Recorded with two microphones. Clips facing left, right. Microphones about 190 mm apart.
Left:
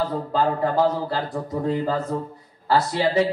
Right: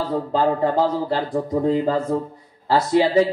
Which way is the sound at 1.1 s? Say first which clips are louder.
Right 5 dB; 20° right (ahead or behind).